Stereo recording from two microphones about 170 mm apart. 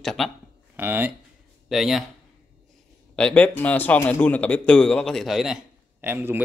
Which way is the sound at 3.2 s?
5° left (ahead or behind).